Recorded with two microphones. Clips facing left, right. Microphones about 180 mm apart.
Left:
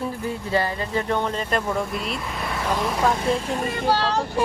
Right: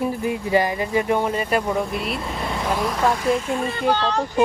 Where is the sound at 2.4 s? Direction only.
10° right (ahead or behind).